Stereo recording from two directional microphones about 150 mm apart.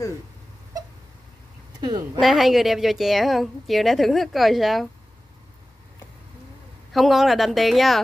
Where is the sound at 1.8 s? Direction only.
25° right (ahead or behind).